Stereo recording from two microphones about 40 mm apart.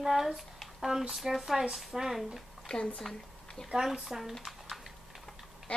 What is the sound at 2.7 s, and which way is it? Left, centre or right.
Speech, left.